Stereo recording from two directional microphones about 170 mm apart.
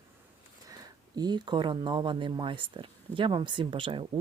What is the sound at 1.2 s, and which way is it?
Speech, 25° right (ahead or behind).